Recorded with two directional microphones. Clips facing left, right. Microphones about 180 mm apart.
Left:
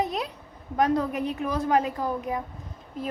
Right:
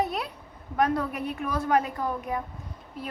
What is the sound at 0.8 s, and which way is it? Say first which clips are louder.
A woman's voice: left 2 dB; 20° left (ahead or behind).